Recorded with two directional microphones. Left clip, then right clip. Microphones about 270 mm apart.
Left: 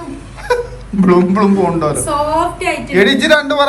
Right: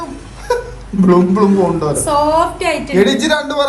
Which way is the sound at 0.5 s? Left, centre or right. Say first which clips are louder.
Left 2 dB; centre.